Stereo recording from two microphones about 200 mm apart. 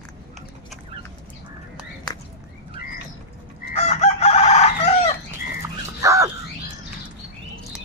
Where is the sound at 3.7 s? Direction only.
35° left (ahead or behind).